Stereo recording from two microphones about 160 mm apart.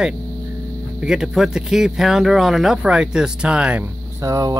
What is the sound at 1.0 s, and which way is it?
Speech, 5° right (ahead or behind).